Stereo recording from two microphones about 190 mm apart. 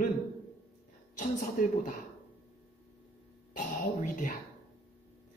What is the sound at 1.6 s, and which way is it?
Speech, 45° left (ahead or behind).